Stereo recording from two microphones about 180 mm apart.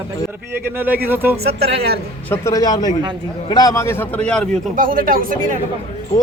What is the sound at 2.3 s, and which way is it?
A man's voice, 15° left (ahead or behind).